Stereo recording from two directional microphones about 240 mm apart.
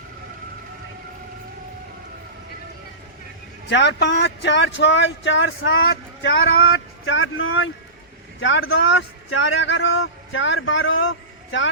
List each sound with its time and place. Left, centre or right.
3.7 s speech: left